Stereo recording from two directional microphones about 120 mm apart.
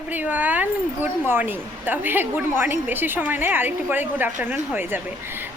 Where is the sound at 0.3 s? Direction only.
15° right (ahead or behind).